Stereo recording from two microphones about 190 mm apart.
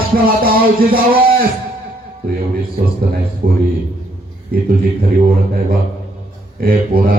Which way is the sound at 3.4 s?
50° right (ahead or behind).